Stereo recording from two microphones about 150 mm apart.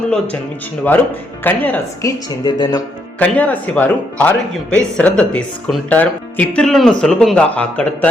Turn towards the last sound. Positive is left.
turn(degrees=10)  # may be behind; listen again after turning